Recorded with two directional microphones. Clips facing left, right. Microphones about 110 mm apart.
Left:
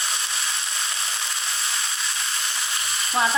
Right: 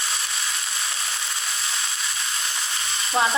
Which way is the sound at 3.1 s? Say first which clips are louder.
Right 1 dB; 20° right (ahead or behind).